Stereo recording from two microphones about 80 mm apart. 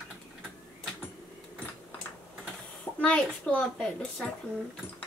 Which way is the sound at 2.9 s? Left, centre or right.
Centre.